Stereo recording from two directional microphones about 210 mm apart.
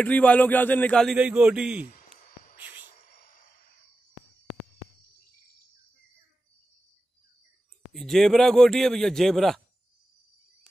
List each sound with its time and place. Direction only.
0.0 s speech: 5° left (ahead or behind)
1.9 s a sound: 40° left (ahead or behind)
7.9 s speech: centre (ahead or behind)